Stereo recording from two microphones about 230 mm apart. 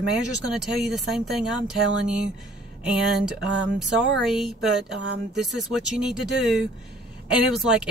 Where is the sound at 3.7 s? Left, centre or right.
Centre.